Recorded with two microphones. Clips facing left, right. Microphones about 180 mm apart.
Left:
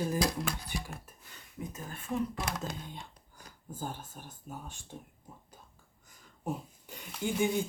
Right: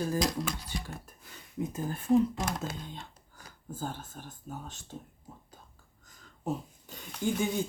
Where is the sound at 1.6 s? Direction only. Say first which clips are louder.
Right 8 dB; 30° right (ahead or behind).